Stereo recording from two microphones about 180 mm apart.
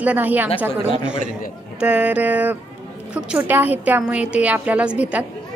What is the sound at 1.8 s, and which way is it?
A woman's voice, 10° right (ahead or behind).